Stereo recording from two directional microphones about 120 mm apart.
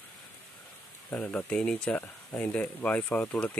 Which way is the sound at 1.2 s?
5° left (ahead or behind).